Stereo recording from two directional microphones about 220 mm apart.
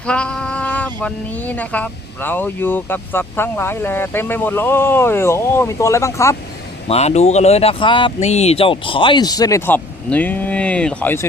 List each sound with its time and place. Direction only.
0.1 s speech: 5° left (ahead or behind)
6.8 s speech: 30° left (ahead or behind); by 11.3 s 10° left (ahead or behind)